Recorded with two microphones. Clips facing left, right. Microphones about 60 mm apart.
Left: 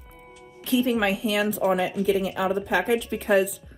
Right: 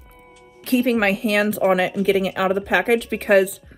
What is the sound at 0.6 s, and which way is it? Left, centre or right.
Speech, right.